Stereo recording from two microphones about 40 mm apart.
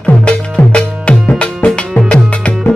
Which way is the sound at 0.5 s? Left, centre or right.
Left.